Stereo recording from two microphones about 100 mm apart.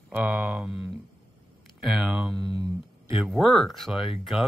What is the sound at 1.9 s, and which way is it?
Speech, 10° right (ahead or behind).